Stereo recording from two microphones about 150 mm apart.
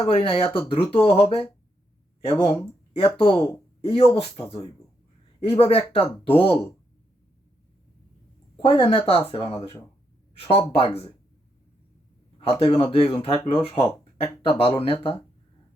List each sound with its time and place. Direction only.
0.0 s speech: 40° left (ahead or behind)
8.5 s speech: 30° left (ahead or behind)
12.4 s speech: 40° left (ahead or behind)